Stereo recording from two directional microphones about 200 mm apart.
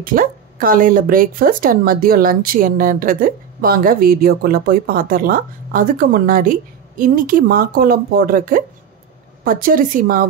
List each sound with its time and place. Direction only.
0.0 s speech: 45° right (ahead or behind)